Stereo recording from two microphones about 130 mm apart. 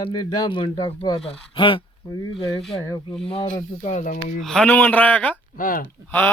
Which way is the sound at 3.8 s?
65° left (ahead or behind).